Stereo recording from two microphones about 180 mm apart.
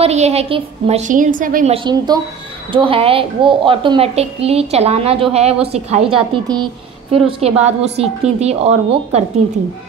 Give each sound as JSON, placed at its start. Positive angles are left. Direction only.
{"t": 0.0, "sound": "a woman's voice", "side_deg": -35}
{"t": 1.7, "sound": "a woman's voice", "side_deg": -25}